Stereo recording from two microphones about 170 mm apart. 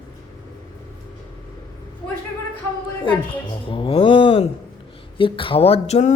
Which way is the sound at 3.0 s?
30° left (ahead or behind).